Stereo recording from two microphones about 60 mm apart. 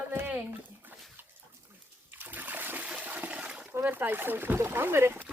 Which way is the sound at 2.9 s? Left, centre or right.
Centre.